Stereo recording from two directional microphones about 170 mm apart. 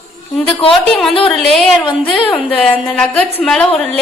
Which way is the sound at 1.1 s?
35° left (ahead or behind).